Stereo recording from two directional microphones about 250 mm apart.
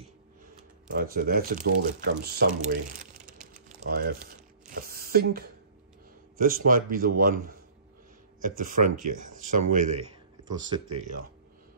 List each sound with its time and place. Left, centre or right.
0.9 s speech: right
3.5 s crumpling: right
6.3 s speech: right